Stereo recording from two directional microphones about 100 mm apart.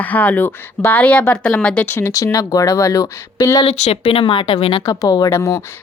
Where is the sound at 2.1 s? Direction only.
35° left (ahead or behind).